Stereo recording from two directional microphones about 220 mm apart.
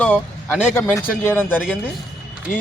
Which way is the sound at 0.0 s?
5° left (ahead or behind).